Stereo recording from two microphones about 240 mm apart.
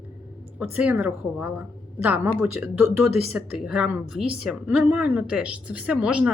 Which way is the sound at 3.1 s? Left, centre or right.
Left.